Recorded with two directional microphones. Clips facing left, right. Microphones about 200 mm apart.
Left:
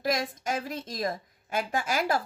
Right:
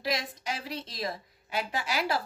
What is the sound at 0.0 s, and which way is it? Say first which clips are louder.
A woman's voice: left 4 dB; 50° left (ahead or behind).